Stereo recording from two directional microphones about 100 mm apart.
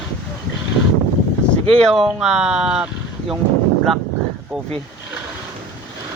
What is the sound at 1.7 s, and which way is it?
Speech, 5° left (ahead or behind).